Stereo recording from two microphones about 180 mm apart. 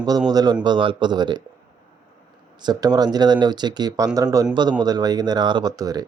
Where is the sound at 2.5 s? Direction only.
25° right (ahead or behind).